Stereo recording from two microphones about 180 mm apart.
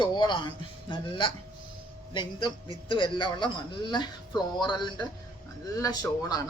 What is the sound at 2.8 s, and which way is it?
A man's voice, 25° left (ahead or behind).